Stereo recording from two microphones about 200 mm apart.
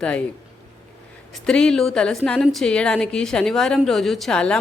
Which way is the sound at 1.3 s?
5° left (ahead or behind).